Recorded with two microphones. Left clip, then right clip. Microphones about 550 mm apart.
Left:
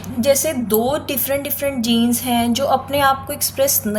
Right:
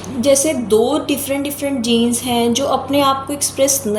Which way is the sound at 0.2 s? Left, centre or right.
Left.